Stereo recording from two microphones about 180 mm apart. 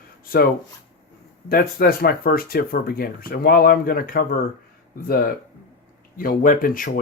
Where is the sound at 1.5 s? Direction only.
55° left (ahead or behind).